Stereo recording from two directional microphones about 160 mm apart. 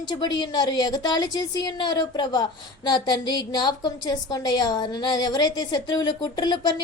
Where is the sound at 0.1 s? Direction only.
25° left (ahead or behind).